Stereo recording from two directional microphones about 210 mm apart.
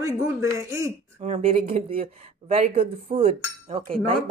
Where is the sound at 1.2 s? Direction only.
30° right (ahead or behind).